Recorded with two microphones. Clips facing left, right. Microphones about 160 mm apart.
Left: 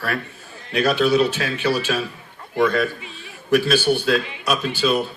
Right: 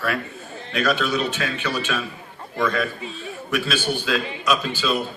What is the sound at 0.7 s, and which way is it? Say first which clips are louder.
A man's voice: left 5 dB; 35° left (ahead or behind).